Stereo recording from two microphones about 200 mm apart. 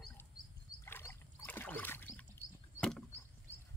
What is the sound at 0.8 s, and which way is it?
Rowboat, 10° left (ahead or behind).